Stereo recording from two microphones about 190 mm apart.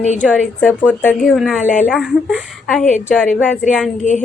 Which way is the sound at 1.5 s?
45° left (ahead or behind).